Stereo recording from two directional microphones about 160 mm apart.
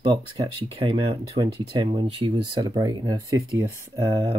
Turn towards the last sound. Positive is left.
turn(degrees=-20)  # may be behind; listen again after turning